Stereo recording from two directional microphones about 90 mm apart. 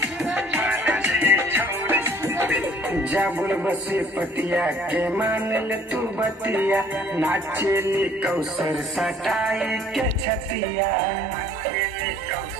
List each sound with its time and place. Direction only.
0.3 s music: 20° right (ahead or behind)
8.0 s music: 15° right (ahead or behind)
8.7 s music: 5° right (ahead or behind)